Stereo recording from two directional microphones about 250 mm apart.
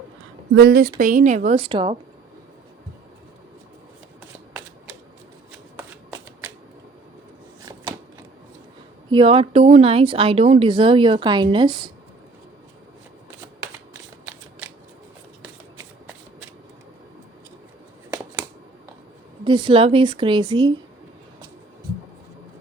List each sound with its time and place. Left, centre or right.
0.5 s a woman's voice: right
5.7 s shuffling cards: centre
9.0 s speech: right
19.5 s speech: centre